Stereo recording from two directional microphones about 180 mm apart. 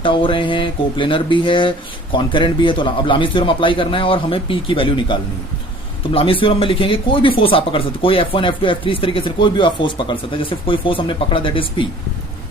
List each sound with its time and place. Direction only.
0.0 s speech: 30° left (ahead or behind)
6.1 s speech: 30° left (ahead or behind)